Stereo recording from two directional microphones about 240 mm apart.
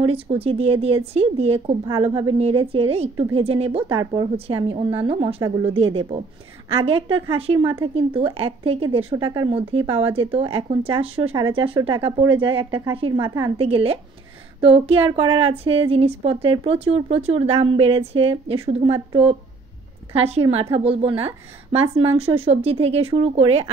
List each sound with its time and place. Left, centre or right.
0.0 s a woman's voice: right
7.2 s a woman's voice: right
22.4 s a woman's voice: right